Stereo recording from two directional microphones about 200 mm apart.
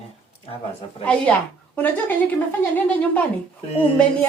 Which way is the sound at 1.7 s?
10° left (ahead or behind).